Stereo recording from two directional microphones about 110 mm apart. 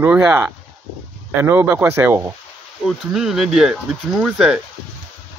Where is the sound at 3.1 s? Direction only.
5° right (ahead or behind).